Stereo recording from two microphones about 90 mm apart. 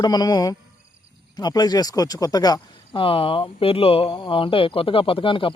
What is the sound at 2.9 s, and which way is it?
Speech, 80° left.